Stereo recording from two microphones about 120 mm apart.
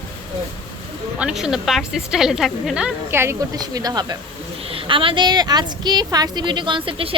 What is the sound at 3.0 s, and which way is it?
Speech, 20° right (ahead or behind).